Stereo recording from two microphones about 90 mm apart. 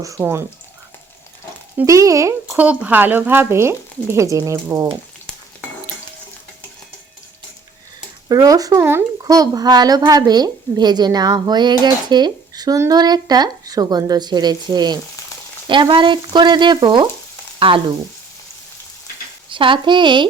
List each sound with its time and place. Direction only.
0.0 s speech: 35° right (ahead or behind)
1.8 s speech: 35° right (ahead or behind)
2.6 s speech: 15° right (ahead or behind); by 4.9 s 35° right (ahead or behind)
8.3 s speech: 40° right (ahead or behind)
8.8 s speech: 25° right (ahead or behind)
9.2 s a woman's voice: 40° right (ahead or behind)
15.6 s frying: 65° right (ahead or behind)
17.6 s frying: 70° right (ahead or behind)
19.5 s frying: 70° right (ahead or behind)